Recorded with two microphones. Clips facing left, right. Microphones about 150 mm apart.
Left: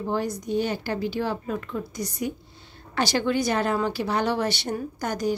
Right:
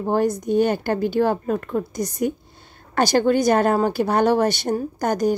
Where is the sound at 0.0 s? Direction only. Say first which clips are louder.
Right 7 dB; 50° right (ahead or behind).